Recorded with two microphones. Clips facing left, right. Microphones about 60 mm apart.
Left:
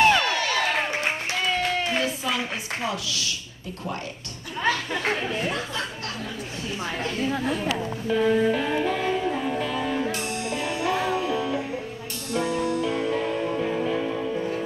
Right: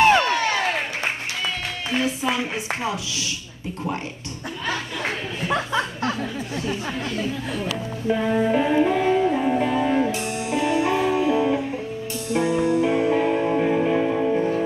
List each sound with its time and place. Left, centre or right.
0.1 s a sound: right
2.0 s a woman's voice: right
5.5 s chuckle: right
7.0 s a woman's voice: left
8.1 s music: right